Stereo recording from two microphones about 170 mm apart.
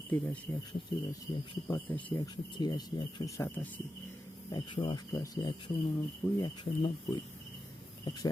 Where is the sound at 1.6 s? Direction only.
15° left (ahead or behind).